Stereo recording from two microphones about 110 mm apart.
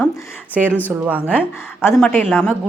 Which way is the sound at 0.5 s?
15° right (ahead or behind).